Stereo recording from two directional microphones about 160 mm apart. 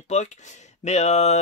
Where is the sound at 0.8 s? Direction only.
45° left (ahead or behind).